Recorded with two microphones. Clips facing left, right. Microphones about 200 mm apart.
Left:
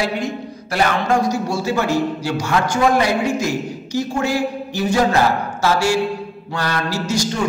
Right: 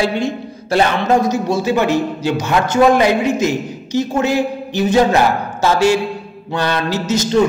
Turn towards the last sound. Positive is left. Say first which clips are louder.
# right 3 dB
turn(degrees=-20)  # may be behind; listen again after turning